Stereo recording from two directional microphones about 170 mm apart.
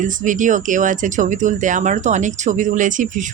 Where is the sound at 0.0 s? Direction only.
50° right (ahead or behind).